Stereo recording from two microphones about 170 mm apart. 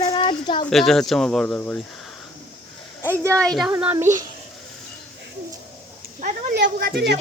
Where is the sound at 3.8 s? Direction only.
15° right (ahead or behind).